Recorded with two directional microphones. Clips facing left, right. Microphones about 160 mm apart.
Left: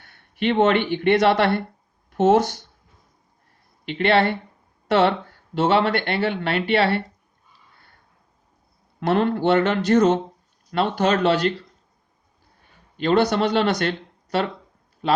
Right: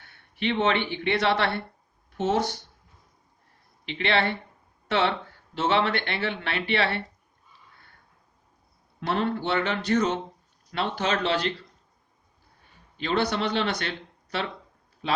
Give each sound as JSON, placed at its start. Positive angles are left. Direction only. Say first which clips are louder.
{"t": 0.3, "sound": "speech", "louder": "left 6 dB", "side_deg": 50}
{"t": 3.8, "sound": "speech", "louder": "left 6 dB", "side_deg": 45}
{"t": 9.0, "sound": "speech", "louder": "left 7 dB", "side_deg": 55}
{"t": 13.0, "sound": "speech", "louder": "left 7 dB", "side_deg": 45}